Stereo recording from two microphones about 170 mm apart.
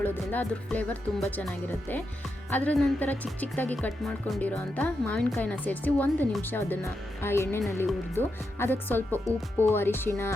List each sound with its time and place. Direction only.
0.0 s a woman's voice: 10° left (ahead or behind)